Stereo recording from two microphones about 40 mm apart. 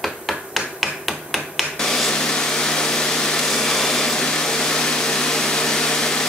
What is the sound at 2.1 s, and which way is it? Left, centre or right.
Vehicle, left.